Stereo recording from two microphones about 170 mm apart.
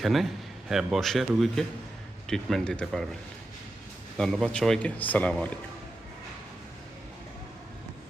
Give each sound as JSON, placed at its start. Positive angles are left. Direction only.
{"t": 0.0, "sound": "speech", "side_deg": 0}
{"t": 4.2, "sound": "speech", "side_deg": 5}